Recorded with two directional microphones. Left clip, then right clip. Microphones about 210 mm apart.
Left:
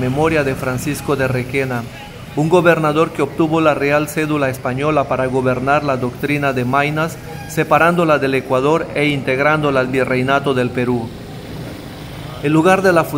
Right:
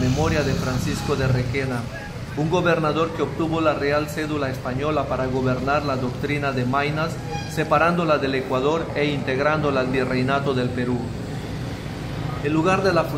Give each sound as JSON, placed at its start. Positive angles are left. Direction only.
{"t": 0.0, "sound": "a man's voice", "side_deg": 35}
{"t": 12.4, "sound": "a man's voice", "side_deg": 30}